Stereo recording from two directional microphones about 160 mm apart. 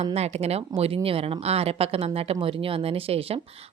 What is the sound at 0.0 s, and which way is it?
Speech, 40° right (ahead or behind).